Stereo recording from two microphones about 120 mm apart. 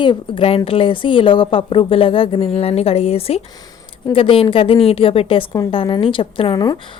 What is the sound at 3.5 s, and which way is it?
Speech, 30° left (ahead or behind).